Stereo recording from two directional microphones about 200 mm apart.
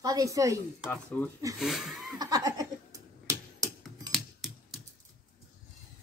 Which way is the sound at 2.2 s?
20° right (ahead or behind).